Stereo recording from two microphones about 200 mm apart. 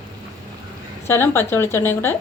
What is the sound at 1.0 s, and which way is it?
A woman's voice, 10° left (ahead or behind).